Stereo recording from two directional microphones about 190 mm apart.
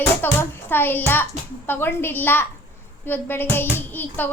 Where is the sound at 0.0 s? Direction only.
10° left (ahead or behind).